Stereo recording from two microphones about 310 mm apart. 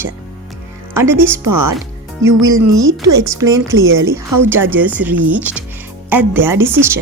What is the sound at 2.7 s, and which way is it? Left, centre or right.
Speech, right.